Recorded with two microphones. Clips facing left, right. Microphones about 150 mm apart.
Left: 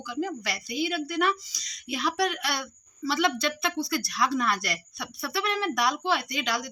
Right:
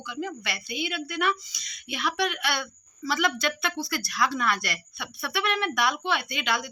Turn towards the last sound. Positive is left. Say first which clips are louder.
# right 1 dB
turn(degrees=35)  # may be behind; listen again after turning